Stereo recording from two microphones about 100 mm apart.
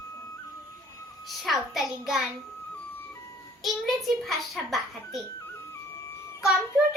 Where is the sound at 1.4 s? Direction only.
Centre (ahead or behind).